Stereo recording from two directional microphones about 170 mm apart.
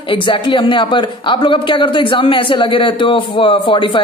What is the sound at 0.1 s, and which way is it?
Speech, 30° left (ahead or behind).